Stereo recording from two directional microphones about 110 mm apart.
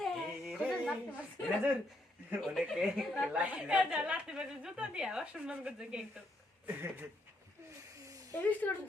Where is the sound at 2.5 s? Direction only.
Centre (ahead or behind).